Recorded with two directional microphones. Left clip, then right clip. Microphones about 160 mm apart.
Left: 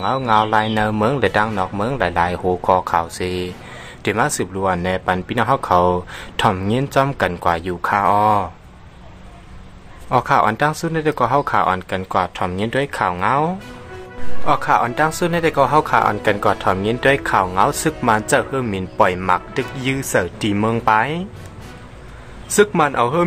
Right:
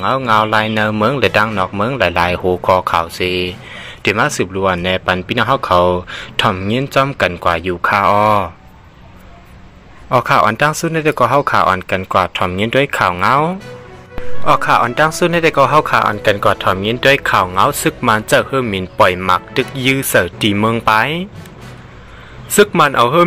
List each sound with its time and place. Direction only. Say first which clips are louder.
0.0 s a man's voice: right 3 dB; 10° right (ahead or behind)
10.0 s a man's voice: right 4 dB; 15° right (ahead or behind)
22.6 s a man's voice: right 5 dB; 15° right (ahead or behind)